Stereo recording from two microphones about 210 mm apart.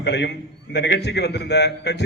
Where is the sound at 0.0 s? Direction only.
55° left (ahead or behind).